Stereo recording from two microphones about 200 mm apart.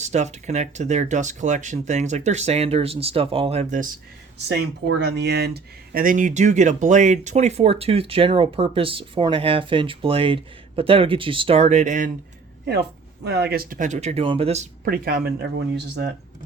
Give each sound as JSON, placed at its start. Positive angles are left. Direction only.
{"t": 0.0, "sound": "speech", "side_deg": -35}
{"t": 4.4, "sound": "speech", "side_deg": -60}
{"t": 13.2, "sound": "speech", "side_deg": -55}
{"t": 14.8, "sound": "speech", "side_deg": -50}